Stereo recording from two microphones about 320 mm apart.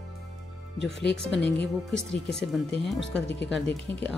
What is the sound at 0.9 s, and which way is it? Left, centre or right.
Speech, left.